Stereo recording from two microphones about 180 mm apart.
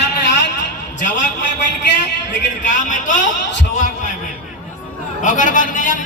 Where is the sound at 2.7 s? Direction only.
45° left (ahead or behind).